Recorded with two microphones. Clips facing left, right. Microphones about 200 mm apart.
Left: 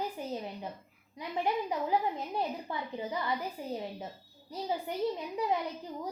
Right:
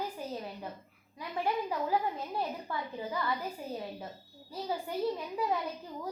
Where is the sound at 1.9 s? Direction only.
20° left (ahead or behind).